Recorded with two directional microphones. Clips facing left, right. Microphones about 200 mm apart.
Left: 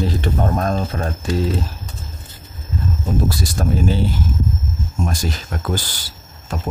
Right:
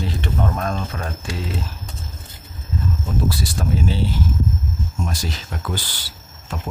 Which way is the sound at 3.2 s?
45° left (ahead or behind).